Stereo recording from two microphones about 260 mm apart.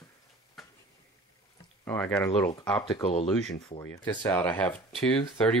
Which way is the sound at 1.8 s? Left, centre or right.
Centre.